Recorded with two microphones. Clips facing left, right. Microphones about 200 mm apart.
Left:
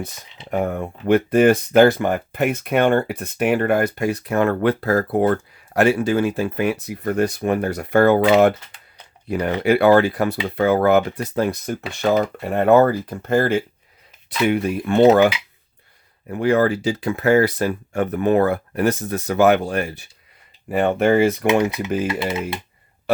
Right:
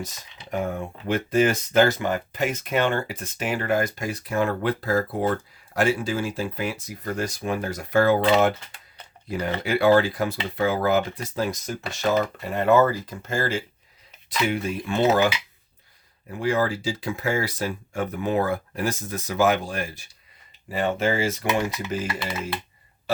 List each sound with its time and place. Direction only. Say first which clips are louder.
0.5 s speech: left 5 dB; 60° left (ahead or behind)
16.3 s speech: left 6 dB; 65° left (ahead or behind)